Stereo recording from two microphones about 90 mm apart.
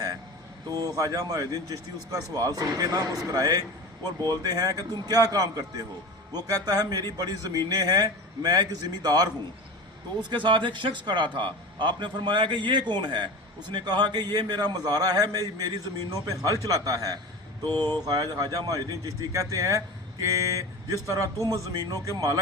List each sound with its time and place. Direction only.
0.9 s a man's voice: 45° right (ahead or behind)
10.2 s a man's voice: 60° right (ahead or behind); by 22.1 s 40° right (ahead or behind)